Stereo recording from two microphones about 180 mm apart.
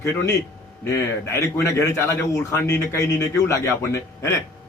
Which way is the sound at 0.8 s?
15° left (ahead or behind).